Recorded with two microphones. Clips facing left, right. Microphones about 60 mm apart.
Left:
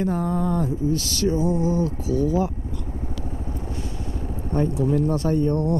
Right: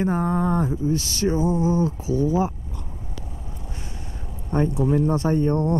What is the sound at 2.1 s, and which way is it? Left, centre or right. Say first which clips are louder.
Speech: left 2 dB; left.